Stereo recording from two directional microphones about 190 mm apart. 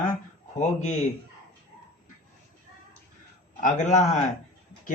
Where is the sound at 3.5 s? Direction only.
40° left (ahead or behind).